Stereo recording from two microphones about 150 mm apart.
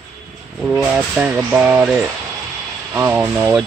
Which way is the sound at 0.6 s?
5° right (ahead or behind).